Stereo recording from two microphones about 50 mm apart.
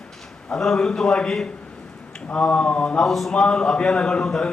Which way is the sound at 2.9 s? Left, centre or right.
Centre.